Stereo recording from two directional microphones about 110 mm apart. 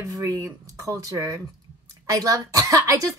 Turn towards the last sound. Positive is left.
turn(degrees=-30)  # may be behind; listen again after turning